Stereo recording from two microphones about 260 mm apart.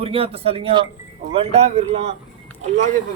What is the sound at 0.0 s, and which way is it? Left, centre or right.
Speech, right.